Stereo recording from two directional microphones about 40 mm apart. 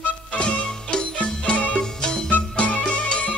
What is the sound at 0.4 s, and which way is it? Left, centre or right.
Music, left.